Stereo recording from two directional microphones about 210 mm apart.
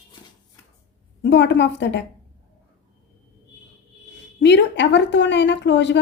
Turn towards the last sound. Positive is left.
turn(degrees=55)  # may be behind; listen again after turning